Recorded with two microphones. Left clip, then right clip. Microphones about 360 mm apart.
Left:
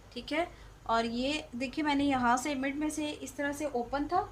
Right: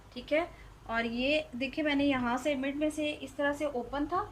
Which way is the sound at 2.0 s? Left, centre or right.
Centre.